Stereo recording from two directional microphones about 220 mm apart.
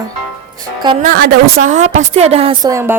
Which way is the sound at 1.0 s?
40° right (ahead or behind).